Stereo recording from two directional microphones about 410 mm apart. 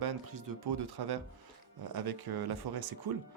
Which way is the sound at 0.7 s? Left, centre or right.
Right.